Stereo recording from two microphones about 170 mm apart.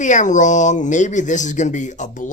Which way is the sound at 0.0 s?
45° left (ahead or behind).